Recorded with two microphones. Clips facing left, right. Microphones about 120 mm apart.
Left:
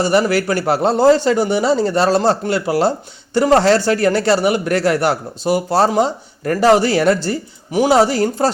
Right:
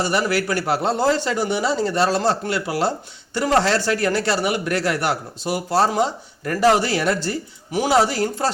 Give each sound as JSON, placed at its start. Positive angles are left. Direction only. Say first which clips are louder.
{"t": 0.0, "sound": "a man's voice", "louder": "left 6 dB", "side_deg": 35}